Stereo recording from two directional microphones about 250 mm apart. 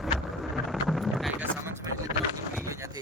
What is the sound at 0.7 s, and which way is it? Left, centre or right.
Vehicle, centre.